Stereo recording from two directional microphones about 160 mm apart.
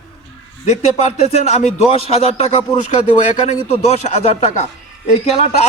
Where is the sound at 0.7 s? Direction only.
40° left (ahead or behind).